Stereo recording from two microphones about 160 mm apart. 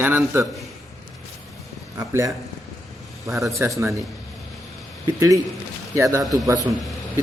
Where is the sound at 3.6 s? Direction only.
20° right (ahead or behind).